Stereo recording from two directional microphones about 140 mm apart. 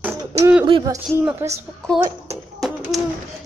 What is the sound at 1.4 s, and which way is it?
Speech, 15° right (ahead or behind).